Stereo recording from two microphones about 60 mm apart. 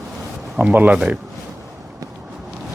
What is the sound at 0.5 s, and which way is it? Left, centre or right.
Speech, right.